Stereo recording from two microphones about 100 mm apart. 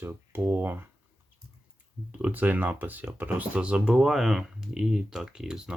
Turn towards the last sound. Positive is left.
turn(degrees=-5)  # may be behind; listen again after turning